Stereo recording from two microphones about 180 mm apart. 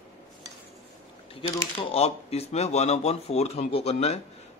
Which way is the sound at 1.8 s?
35° left (ahead or behind).